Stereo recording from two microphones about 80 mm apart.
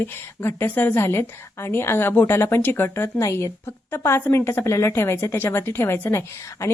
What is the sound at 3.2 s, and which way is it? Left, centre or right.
A woman's voice, left.